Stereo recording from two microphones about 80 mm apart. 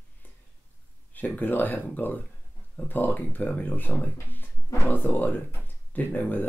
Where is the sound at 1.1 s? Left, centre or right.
Left.